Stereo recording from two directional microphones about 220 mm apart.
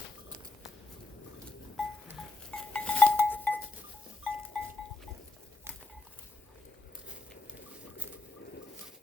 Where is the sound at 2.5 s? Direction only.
5° left (ahead or behind).